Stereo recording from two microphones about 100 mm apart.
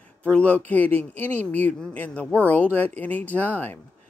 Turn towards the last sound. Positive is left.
turn(degrees=20)  # may be behind; listen again after turning